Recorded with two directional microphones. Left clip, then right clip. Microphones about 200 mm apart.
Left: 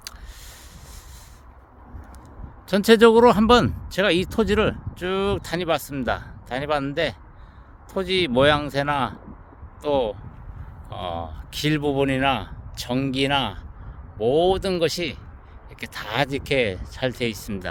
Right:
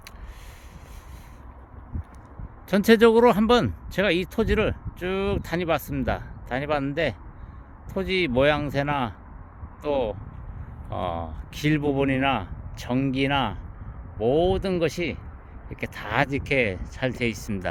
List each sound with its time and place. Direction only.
2.6 s speech: 5° left (ahead or behind)